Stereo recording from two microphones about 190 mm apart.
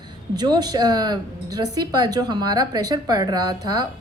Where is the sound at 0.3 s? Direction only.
20° right (ahead or behind).